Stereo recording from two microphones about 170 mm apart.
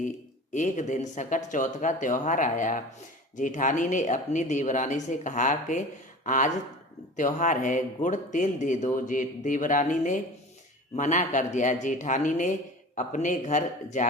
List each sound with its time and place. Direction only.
0.5 s speech: 45° left (ahead or behind)